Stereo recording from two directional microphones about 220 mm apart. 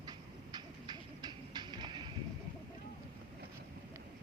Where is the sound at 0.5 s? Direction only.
20° right (ahead or behind).